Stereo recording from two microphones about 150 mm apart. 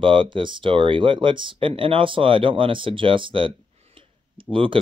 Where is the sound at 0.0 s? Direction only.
35° right (ahead or behind).